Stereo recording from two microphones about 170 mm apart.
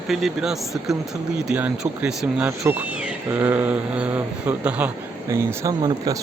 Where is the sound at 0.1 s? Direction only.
Centre (ahead or behind).